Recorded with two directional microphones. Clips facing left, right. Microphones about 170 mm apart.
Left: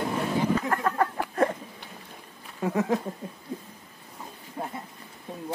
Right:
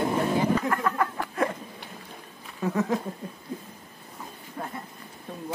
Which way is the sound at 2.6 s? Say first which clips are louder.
Even; 30° left (ahead or behind).